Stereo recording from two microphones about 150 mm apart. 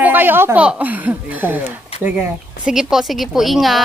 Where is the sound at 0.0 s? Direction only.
15° right (ahead or behind).